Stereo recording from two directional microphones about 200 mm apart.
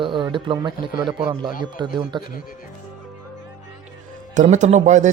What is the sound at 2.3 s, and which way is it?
Speech, 45° left (ahead or behind).